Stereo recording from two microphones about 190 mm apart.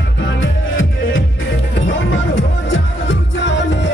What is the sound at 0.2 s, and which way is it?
Music, 80° left.